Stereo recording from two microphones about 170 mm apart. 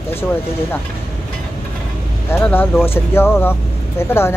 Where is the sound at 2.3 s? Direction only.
15° left (ahead or behind).